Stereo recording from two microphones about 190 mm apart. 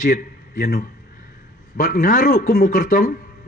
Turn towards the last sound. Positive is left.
turn(degrees=45)  # may be behind; listen again after turning